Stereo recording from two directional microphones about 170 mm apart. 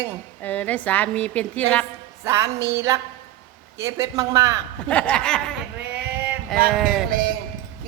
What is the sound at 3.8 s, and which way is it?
Speech, 20° right (ahead or behind).